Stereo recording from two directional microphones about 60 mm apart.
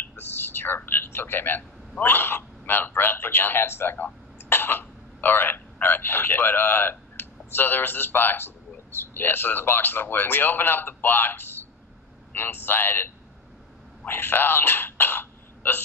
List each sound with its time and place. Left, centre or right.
0.0 s a man's voice: left